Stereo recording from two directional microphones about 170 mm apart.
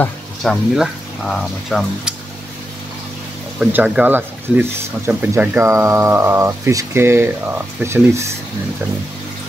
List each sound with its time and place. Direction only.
0.0 s speech: centre (ahead or behind)
3.5 s speech: 5° right (ahead or behind)